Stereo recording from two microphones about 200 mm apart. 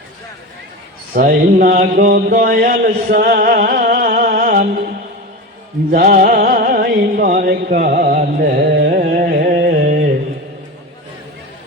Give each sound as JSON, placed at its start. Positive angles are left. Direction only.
{"t": 1.1, "sound": "speech", "side_deg": -45}
{"t": 5.9, "sound": "music", "side_deg": -45}